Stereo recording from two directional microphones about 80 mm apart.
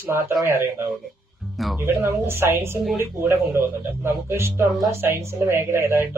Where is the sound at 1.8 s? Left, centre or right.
Right.